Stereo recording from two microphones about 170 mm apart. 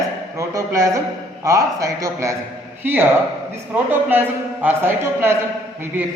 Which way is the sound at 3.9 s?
10° right (ahead or behind).